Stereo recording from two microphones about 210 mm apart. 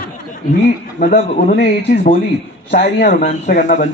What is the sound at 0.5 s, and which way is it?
A man's voice, 40° left (ahead or behind).